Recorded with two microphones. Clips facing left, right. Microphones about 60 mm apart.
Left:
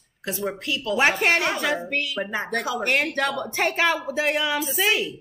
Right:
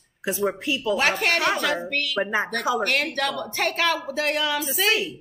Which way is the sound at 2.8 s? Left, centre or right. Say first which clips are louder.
Left 1 dB; centre.